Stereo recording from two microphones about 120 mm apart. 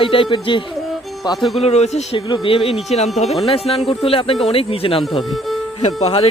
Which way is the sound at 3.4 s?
55° left (ahead or behind).